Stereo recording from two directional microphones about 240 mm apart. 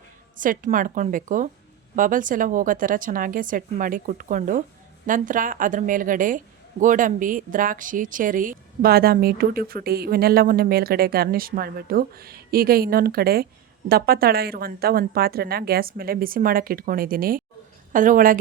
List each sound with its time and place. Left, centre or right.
0.3 s a woman's voice: right